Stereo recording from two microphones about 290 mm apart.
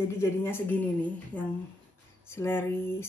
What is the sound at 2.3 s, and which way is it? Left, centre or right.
Speech, centre.